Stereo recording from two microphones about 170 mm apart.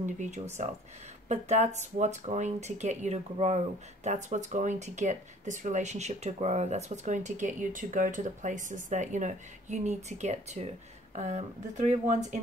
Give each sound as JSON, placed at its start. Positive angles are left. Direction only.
{"t": 0.0, "sound": "speech", "side_deg": -45}